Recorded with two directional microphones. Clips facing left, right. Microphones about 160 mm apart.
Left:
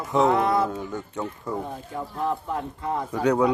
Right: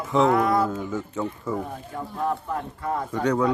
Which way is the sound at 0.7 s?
Centre (ahead or behind).